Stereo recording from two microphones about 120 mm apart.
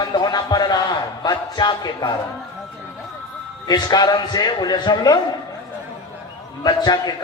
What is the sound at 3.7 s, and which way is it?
Speech, 35° left (ahead or behind).